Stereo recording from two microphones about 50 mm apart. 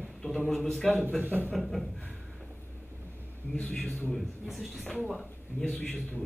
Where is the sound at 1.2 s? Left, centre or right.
Right.